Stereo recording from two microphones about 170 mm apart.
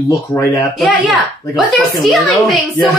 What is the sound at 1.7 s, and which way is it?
A woman's voice, centre (ahead or behind).